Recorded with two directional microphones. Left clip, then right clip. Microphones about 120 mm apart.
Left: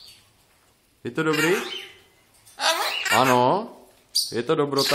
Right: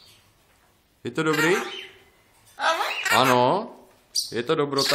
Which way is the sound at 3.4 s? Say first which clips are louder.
Left 1 dB; 30° left (ahead or behind).